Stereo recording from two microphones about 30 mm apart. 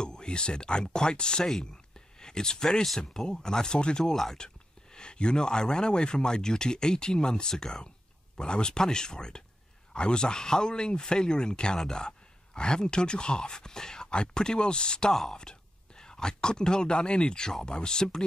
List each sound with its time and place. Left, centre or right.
0.0 s speech: left
1.6 s a sound: left
3.0 s speech: left
4.1 s speech: centre
4.9 s speech: left
15.5 s whispering: left
16.0 s speech: left